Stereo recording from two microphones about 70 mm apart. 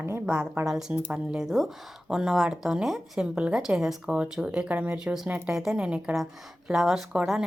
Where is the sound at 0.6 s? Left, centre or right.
Right.